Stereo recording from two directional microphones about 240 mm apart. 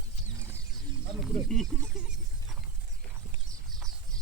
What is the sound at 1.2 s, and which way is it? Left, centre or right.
Speech, centre.